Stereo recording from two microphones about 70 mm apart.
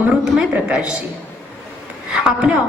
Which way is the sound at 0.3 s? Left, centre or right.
Centre.